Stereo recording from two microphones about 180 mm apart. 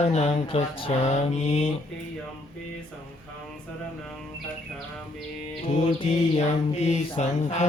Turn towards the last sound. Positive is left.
turn(degrees=40)  # may be behind; listen again after turning